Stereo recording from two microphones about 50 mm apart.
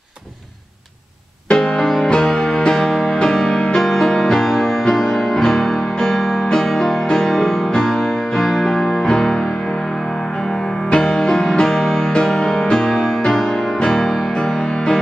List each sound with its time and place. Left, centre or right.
1.5 s music: centre
10.9 s music: centre